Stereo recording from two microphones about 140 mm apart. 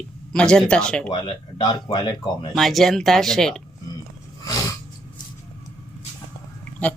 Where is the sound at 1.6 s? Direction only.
30° left (ahead or behind).